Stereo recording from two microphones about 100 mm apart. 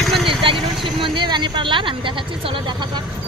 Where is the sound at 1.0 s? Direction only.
50° right (ahead or behind).